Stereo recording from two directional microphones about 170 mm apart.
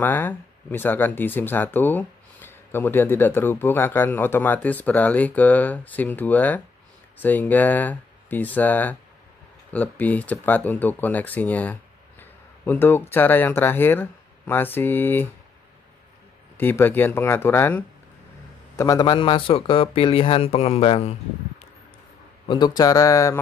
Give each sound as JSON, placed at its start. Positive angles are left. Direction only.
{"t": 0.0, "sound": "speech", "side_deg": 10}
{"t": 16.5, "sound": "speech", "side_deg": 10}
{"t": 18.8, "sound": "a man's voice", "side_deg": 20}
{"t": 22.5, "sound": "speech", "side_deg": 25}